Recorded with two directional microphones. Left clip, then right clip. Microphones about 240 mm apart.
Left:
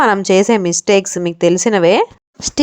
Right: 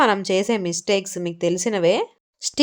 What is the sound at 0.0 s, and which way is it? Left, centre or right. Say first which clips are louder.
A woman's voice: left 7 dB; left.